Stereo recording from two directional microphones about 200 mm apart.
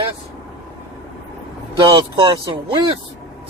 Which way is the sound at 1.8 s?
25° right (ahead or behind).